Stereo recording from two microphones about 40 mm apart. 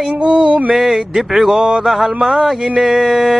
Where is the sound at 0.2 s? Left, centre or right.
Right.